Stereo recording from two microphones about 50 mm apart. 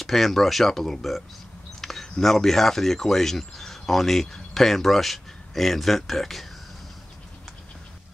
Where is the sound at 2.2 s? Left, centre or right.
Centre.